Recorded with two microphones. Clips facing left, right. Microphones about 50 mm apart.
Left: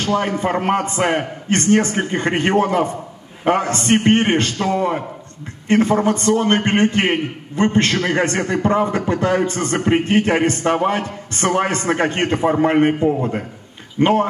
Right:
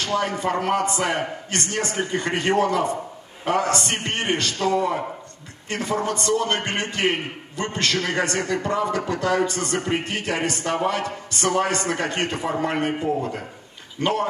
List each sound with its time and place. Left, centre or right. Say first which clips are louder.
0.0 s a man's voice: left 4 dB; left